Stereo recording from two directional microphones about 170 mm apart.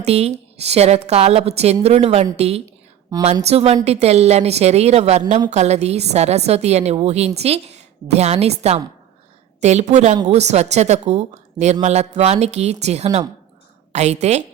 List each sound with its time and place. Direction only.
0.0 s a woman's voice: 40° right (ahead or behind)
3.1 s speech: 20° right (ahead or behind)
3.4 s a woman's voice: 35° right (ahead or behind)